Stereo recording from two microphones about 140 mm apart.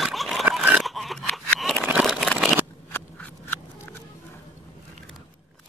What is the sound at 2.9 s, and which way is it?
Biting, 15° left (ahead or behind).